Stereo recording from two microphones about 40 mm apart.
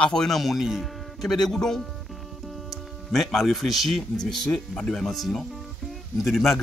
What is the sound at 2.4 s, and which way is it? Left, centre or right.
Music, centre.